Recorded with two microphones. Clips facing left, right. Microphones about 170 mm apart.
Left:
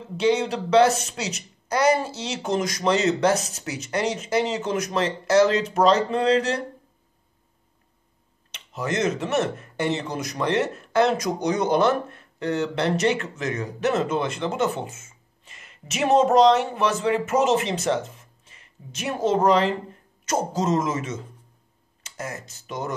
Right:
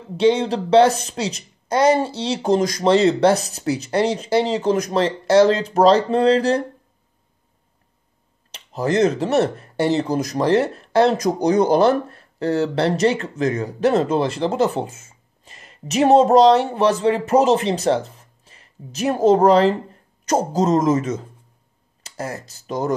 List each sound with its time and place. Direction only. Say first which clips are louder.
0.2 s speech: right 5 dB; 30° right (ahead or behind)
8.5 s speech: right 6 dB; 35° right (ahead or behind)